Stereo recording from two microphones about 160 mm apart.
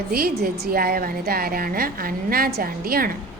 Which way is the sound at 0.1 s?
70° right (ahead or behind).